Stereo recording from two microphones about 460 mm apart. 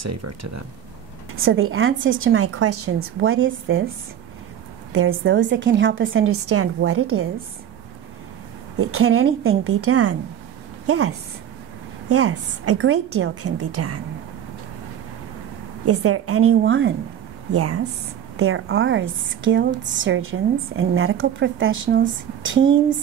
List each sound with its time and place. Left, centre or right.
0.0 s a woman's voice: right
4.9 s a woman's voice: right
8.7 s a woman's voice: right
15.8 s a woman's voice: right